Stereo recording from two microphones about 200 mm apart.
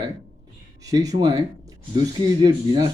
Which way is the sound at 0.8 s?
15° right (ahead or behind).